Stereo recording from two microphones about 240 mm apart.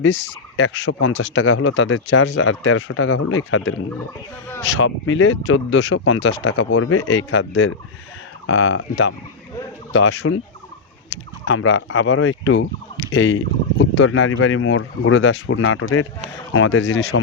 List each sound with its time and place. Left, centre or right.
0.0 s speech: left
4.8 s speech: left
11.4 s speech: left